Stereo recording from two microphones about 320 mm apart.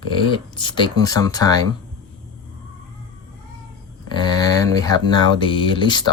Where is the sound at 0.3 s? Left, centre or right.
Centre.